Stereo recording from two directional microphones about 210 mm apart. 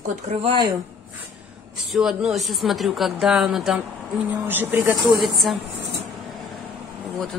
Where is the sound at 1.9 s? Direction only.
Centre (ahead or behind).